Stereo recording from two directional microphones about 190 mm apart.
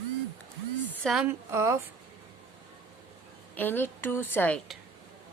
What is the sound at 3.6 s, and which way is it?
Speech, 10° left (ahead or behind).